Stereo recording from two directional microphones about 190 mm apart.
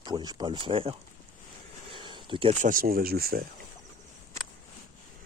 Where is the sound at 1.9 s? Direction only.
25° right (ahead or behind).